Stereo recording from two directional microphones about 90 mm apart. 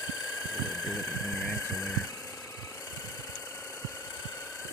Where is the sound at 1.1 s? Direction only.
30° left (ahead or behind).